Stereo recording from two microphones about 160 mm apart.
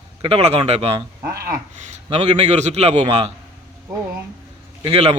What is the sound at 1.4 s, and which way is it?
Speech, 65° right (ahead or behind).